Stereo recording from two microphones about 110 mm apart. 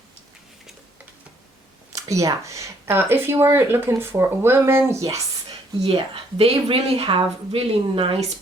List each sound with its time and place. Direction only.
1.9 s speech: 30° right (ahead or behind)
5.8 s speech: 60° right (ahead or behind)